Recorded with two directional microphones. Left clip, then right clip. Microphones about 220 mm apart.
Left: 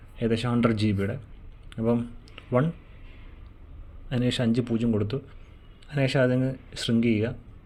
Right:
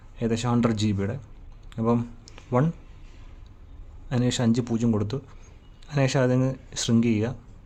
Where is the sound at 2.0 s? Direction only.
10° right (ahead or behind).